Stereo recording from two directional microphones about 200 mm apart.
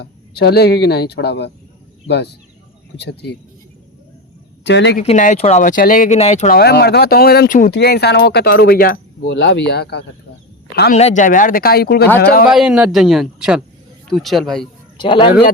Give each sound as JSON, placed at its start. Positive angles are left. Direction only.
{"t": 0.0, "sound": "speech", "side_deg": 55}
{"t": 4.6, "sound": "speech", "side_deg": 60}
{"t": 5.0, "sound": "speech", "side_deg": 35}
{"t": 6.6, "sound": "speech", "side_deg": 55}
{"t": 10.9, "sound": "speech", "side_deg": 35}
{"t": 12.5, "sound": "a man's voice", "side_deg": -5}
{"t": 14.9, "sound": "a man's voice", "side_deg": 25}